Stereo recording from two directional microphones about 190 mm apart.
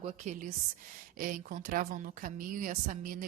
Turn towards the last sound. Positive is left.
turn(degrees=-45)  # may be behind; listen again after turning